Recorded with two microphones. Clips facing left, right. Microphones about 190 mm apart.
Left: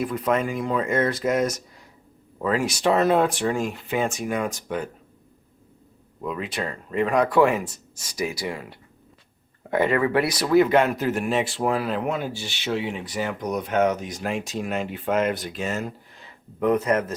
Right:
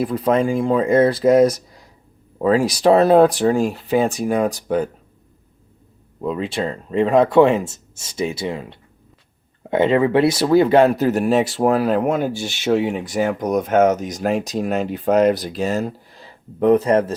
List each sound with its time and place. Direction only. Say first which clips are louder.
0.0 s speech: right 6 dB; 30° right (ahead or behind)
6.2 s speech: right 6 dB; 30° right (ahead or behind)